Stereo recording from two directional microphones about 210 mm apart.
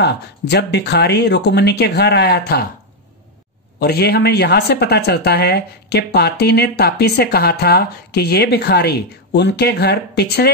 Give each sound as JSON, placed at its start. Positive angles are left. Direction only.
{"t": 0.0, "sound": "a woman's voice", "side_deg": 55}
{"t": 3.8, "sound": "a woman's voice", "side_deg": 45}